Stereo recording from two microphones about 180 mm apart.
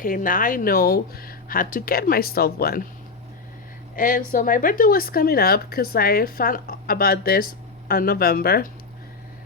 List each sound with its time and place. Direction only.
0.0 s speech: 50° left (ahead or behind)
3.9 s speech: 50° left (ahead or behind)